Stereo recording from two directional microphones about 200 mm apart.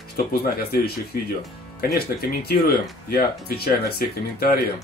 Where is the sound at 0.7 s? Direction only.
50° left (ahead or behind).